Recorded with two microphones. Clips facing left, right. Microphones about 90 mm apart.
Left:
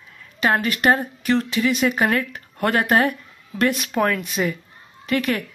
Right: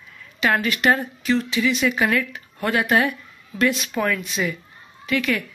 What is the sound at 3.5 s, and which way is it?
Speech, 55° left (ahead or behind).